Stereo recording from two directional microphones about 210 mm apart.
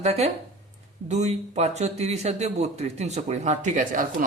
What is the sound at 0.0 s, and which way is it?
Speech, 30° right (ahead or behind).